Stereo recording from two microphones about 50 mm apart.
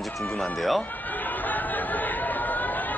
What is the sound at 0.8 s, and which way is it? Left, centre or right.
Chatter, left.